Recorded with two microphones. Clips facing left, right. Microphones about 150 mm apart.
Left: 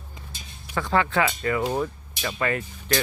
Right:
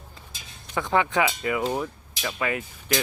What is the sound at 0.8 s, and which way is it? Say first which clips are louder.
Speech: even; 20° right (ahead or behind).